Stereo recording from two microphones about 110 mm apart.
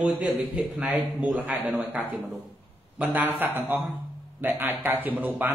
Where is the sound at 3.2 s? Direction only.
20° right (ahead or behind).